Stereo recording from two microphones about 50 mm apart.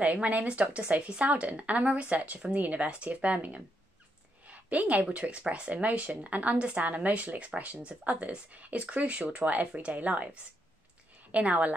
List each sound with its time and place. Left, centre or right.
0.0 s a woman's voice: right